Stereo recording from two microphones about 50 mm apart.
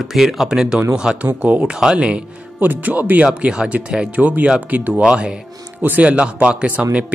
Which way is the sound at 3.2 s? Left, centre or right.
Right.